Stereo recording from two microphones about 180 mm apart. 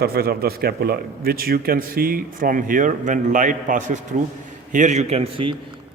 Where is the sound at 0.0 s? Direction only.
60° right (ahead or behind).